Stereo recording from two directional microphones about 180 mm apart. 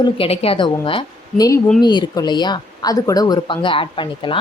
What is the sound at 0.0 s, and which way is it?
Speech, 30° left (ahead or behind).